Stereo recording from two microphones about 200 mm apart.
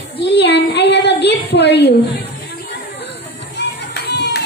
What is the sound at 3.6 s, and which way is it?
Music, 55° left (ahead or behind).